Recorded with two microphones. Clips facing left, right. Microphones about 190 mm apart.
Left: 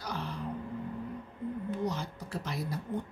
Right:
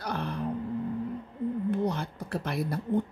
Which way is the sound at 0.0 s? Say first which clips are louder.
Right 5 dB; 60° right (ahead or behind).